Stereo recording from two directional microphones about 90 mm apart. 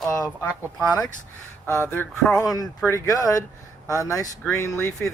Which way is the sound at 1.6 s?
25° left (ahead or behind).